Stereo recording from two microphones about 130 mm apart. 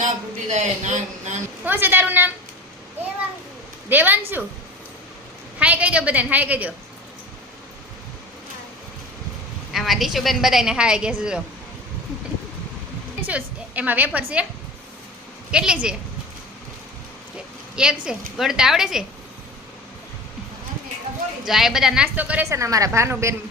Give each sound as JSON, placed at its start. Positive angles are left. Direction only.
{"t": 0.0, "sound": "a man's voice", "side_deg": -65}
{"t": 1.6, "sound": "a woman's voice", "side_deg": -15}
{"t": 3.8, "sound": "a woman's voice", "side_deg": -15}
{"t": 5.5, "sound": "a woman's voice", "side_deg": -10}
{"t": 9.7, "sound": "a woman's voice", "side_deg": 0}
{"t": 13.2, "sound": "a woman's voice", "side_deg": -10}
{"t": 15.5, "sound": "a woman's voice", "side_deg": -5}
{"t": 17.3, "sound": "speech", "side_deg": -5}
{"t": 21.4, "sound": "a woman's voice", "side_deg": 0}
{"t": 22.4, "sound": "a woman's voice", "side_deg": -25}